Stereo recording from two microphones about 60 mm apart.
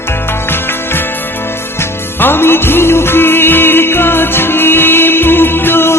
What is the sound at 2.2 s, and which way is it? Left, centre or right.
Music, left.